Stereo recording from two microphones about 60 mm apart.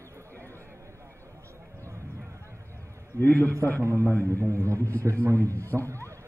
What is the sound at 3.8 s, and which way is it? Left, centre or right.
A man's voice, right.